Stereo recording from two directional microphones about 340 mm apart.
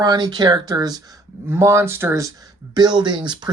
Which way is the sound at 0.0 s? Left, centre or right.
Centre.